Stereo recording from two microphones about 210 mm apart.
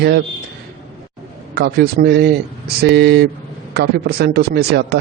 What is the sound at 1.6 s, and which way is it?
A man's voice, 50° right (ahead or behind).